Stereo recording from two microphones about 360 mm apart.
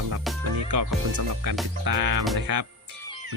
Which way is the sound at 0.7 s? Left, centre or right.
Right.